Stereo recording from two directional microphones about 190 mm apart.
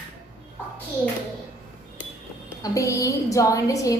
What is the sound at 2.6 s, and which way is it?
A woman's voice, 15° left (ahead or behind).